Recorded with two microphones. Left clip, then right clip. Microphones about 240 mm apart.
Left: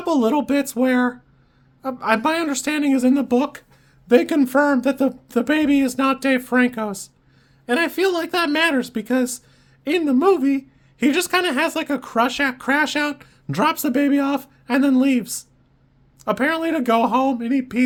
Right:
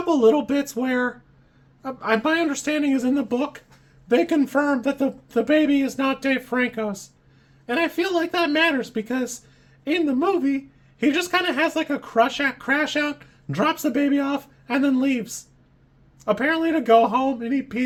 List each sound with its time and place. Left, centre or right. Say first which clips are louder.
0.1 s speech: right 1 dB; left